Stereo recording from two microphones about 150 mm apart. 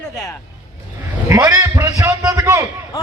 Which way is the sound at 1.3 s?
25° right (ahead or behind).